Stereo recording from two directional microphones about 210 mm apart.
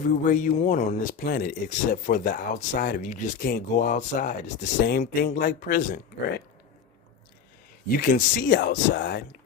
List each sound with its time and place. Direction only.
0.1 s speech: 35° left (ahead or behind)
7.9 s speech: 40° left (ahead or behind)